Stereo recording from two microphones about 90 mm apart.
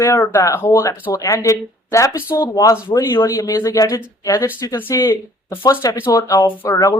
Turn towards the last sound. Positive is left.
turn(degrees=40)  # may be behind; listen again after turning